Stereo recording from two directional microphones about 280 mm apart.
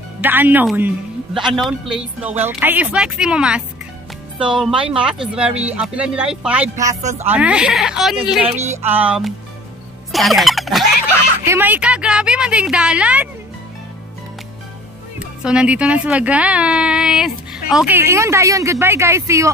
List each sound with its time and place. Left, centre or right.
0.2 s speech: centre
6.9 s speech: right
7.2 s speech: centre
10.1 s music: centre
11.4 s speech: centre
15.1 s speech: centre